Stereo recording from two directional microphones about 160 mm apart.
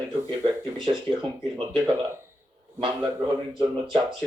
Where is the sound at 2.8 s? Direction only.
30° right (ahead or behind).